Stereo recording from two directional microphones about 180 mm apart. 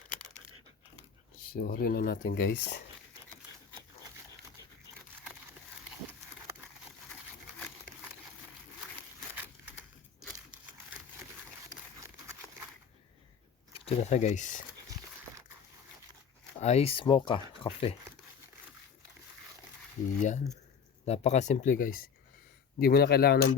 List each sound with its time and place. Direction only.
1.5 s speech: 55° left (ahead or behind)
13.8 s speech: 40° left (ahead or behind)
16.6 s speech: 40° left (ahead or behind)
20.1 s speech: 45° left (ahead or behind)
22.8 s speech: 60° left (ahead or behind)